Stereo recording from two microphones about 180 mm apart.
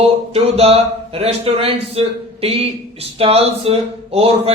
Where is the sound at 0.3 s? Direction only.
35° right (ahead or behind).